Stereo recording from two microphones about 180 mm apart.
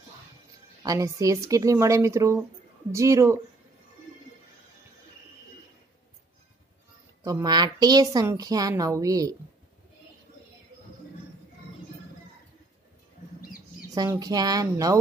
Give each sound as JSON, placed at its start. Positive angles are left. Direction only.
{"t": 0.8, "sound": "speech", "side_deg": -20}
{"t": 7.2, "sound": "a woman's voice", "side_deg": -20}
{"t": 13.4, "sound": "a sound", "side_deg": 55}
{"t": 13.9, "sound": "a woman's voice", "side_deg": -20}